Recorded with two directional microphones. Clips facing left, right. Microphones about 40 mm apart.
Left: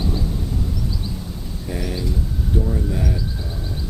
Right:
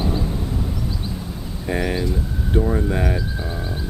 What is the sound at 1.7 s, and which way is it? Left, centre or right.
Speech, right.